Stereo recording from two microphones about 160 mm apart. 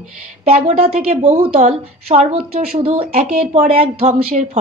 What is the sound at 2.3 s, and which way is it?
Speech, 75° right (ahead or behind).